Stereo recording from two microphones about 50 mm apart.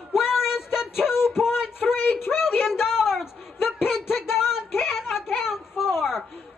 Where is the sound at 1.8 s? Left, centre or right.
Left.